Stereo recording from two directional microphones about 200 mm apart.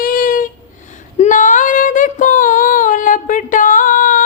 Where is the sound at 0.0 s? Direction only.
45° left (ahead or behind).